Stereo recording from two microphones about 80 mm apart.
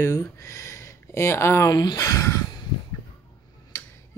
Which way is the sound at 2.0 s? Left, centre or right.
Left.